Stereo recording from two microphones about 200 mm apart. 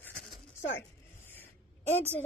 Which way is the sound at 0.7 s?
10° left (ahead or behind).